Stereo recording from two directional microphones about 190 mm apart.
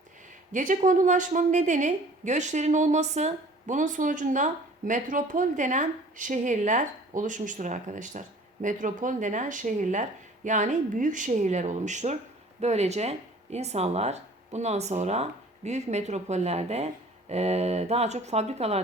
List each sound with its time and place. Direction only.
0.5 s a woman's voice: 40° right (ahead or behind)